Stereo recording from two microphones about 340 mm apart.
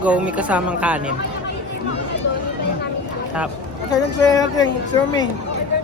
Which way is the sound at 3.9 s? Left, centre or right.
Centre.